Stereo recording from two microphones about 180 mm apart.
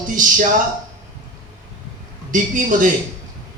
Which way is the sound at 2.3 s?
45° right (ahead or behind).